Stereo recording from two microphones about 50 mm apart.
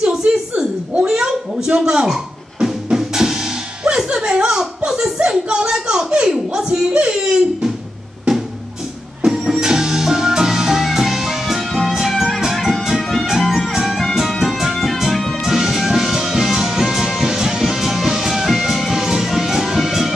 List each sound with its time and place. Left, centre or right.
0.0 s a sound: centre
6.9 s speech: centre
9.2 s music: centre